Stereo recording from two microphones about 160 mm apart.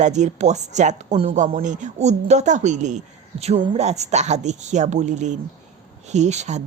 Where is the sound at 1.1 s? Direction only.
35° right (ahead or behind).